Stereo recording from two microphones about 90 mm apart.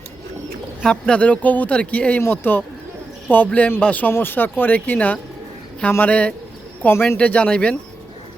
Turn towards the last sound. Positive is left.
turn(degrees=10)  # may be behind; listen again after turning